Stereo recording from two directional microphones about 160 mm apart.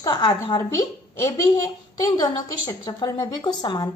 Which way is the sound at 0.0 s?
30° left (ahead or behind).